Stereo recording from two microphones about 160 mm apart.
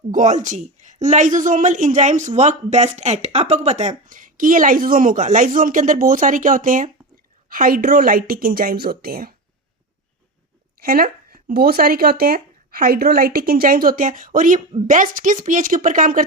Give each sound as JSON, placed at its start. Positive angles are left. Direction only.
{"t": 0.1, "sound": "a woman's voice", "side_deg": -50}
{"t": 10.8, "sound": "a woman's voice", "side_deg": -65}